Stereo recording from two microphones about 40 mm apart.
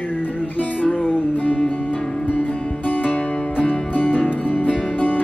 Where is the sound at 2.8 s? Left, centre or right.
Left.